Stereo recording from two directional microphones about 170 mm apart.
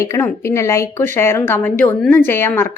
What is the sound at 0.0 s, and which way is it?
A woman's voice, 15° left (ahead or behind).